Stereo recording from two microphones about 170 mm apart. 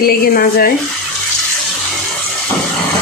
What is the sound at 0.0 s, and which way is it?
Speech, 60° left (ahead or behind).